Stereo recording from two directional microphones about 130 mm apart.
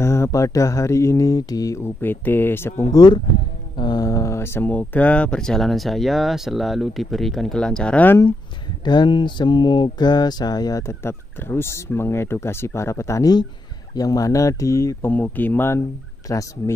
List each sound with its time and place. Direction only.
0.0 s mantra: 20° left (ahead or behind)
3.7 s speech: 35° left (ahead or behind); by 8.2 s 10° left (ahead or behind)
8.8 s mantra: 35° left (ahead or behind)